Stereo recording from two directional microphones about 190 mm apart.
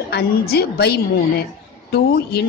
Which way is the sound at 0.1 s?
55° left (ahead or behind).